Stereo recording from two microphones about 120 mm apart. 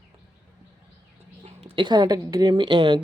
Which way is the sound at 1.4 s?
60° right (ahead or behind).